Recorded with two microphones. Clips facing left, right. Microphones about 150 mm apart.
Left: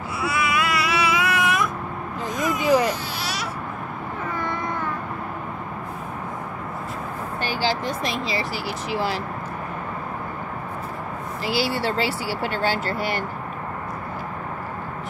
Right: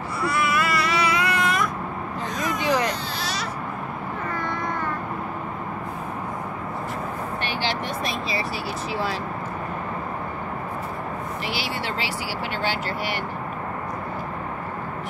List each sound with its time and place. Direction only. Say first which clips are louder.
0.2 s baby cry: even; centre (ahead or behind)
7.4 s vehicle: left 5 dB; 30° left (ahead or behind)
12.5 s speech: left 2 dB; 45° left (ahead or behind)